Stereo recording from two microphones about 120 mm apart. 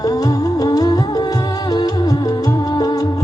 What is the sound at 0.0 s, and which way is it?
Music, 30° left (ahead or behind).